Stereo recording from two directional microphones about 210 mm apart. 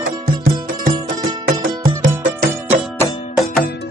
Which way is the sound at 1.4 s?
45° right (ahead or behind).